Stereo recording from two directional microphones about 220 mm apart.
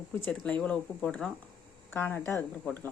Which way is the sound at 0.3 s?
5° left (ahead or behind).